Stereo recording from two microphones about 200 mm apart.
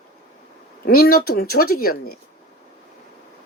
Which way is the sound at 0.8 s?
50° left (ahead or behind).